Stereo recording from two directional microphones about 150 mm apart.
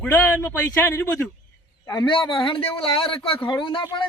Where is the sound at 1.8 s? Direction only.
25° left (ahead or behind).